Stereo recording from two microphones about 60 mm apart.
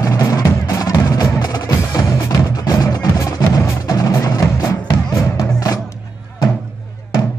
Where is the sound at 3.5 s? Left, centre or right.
Left.